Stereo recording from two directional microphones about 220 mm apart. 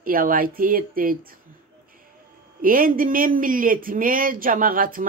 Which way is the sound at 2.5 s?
40° right (ahead or behind).